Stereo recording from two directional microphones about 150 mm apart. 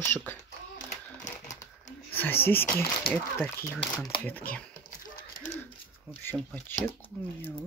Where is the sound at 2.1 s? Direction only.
15° left (ahead or behind).